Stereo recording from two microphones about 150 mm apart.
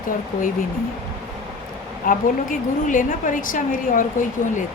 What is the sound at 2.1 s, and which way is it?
A woman's voice, 65° left (ahead or behind).